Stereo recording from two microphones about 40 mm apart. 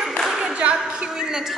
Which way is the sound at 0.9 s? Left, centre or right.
Centre.